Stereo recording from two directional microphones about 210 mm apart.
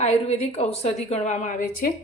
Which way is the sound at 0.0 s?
30° left (ahead or behind).